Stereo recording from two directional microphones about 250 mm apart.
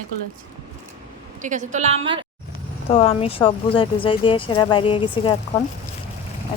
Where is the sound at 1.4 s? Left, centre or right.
Right.